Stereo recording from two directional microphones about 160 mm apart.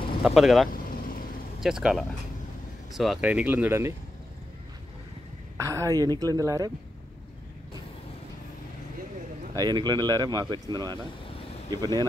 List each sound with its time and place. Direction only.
0.2 s speech: centre (ahead or behind)
0.7 s vehicle: 60° left (ahead or behind)
1.6 s speech: 5° right (ahead or behind)
5.6 s a woman's voice: 20° right (ahead or behind)
9.5 s a woman's voice: 25° right (ahead or behind)